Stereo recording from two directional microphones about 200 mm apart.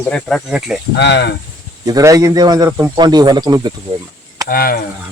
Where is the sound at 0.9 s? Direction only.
55° left (ahead or behind).